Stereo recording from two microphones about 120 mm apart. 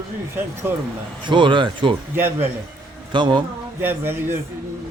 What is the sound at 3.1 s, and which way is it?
Speech, 40° right (ahead or behind).